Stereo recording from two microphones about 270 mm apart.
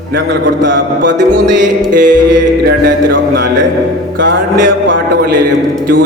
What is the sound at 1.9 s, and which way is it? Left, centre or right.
Music, right.